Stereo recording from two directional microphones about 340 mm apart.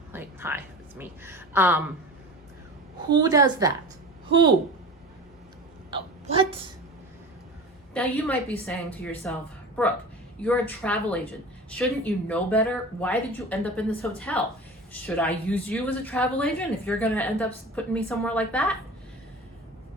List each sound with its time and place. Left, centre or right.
0.1 s a sound: centre
3.1 s a woman's voice: centre
5.9 s hiccup: centre
7.9 s speech: centre